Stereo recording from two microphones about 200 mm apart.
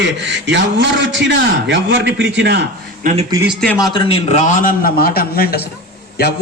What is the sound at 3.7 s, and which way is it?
A man's voice, 20° left (ahead or behind).